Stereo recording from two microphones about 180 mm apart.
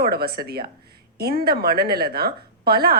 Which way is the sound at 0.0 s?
60° right (ahead or behind).